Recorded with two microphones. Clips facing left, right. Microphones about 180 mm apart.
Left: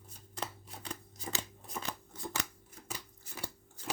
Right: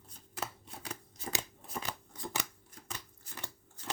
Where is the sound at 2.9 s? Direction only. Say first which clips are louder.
Left 2 dB; 10° left (ahead or behind).